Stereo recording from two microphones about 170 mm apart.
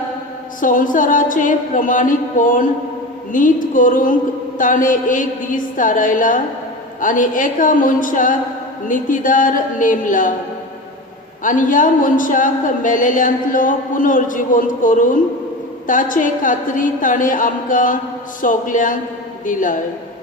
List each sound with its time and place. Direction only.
0.6 s speech: 50° left (ahead or behind)
11.4 s speech: 50° left (ahead or behind)